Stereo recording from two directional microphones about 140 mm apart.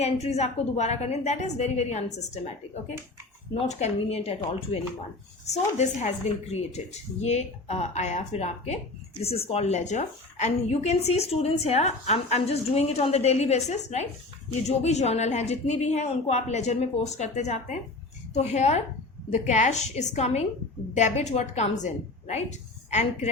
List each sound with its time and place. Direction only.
0.0 s a woman's voice: 50° left (ahead or behind)
3.5 s a woman's voice: 50° left (ahead or behind)
5.7 s a woman's voice: 55° left (ahead or behind)